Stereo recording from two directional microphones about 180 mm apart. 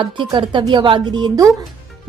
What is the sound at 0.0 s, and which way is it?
Speech, 25° right (ahead or behind).